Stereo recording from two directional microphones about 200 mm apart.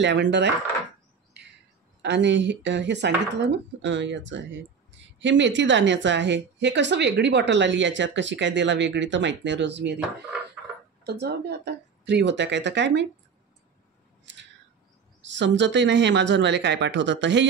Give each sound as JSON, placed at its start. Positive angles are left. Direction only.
{"t": 0.0, "sound": "a woman's voice", "side_deg": -60}
{"t": 2.0, "sound": "a woman's voice", "side_deg": -60}
{"t": 11.1, "sound": "a woman's voice", "side_deg": -55}
{"t": 15.2, "sound": "a woman's voice", "side_deg": -65}